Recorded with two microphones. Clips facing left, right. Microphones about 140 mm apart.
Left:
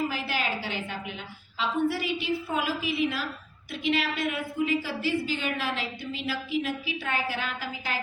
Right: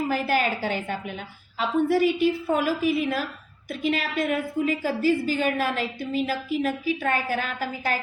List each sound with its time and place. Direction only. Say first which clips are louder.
0.1 s a woman's voice: right 7 dB; 50° right (ahead or behind)